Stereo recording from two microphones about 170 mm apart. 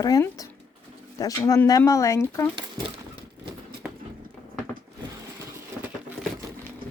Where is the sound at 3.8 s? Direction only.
5° right (ahead or behind).